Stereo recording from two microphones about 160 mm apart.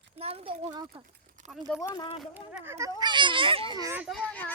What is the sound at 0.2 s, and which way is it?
Speech, 40° right (ahead or behind).